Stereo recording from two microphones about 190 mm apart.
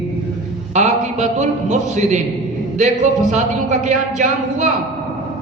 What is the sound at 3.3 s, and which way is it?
Speech, 40° right (ahead or behind).